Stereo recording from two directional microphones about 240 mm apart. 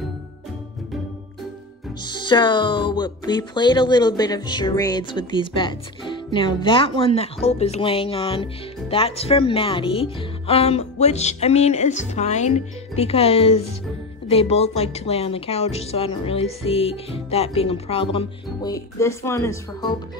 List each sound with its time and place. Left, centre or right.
2.0 s speech: centre